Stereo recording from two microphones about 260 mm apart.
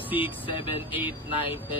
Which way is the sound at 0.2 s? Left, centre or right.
Centre.